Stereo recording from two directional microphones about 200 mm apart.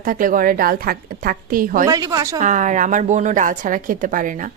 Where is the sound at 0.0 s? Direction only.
45° right (ahead or behind).